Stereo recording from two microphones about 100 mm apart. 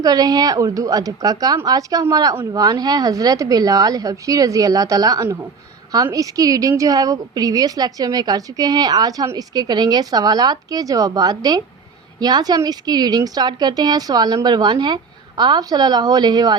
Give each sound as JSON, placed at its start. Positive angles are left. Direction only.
{"t": 0.0, "sound": "a woman's voice", "side_deg": -40}